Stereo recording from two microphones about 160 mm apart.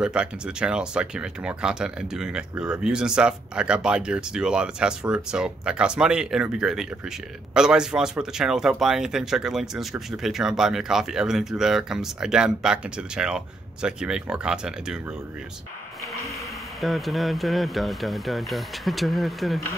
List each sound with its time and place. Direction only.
0.0 s speech: 5° right (ahead or behind)
16.8 s speech: centre (ahead or behind)